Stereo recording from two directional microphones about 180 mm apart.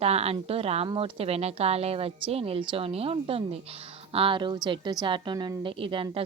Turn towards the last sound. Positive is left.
turn(degrees=-30)  # may be behind; listen again after turning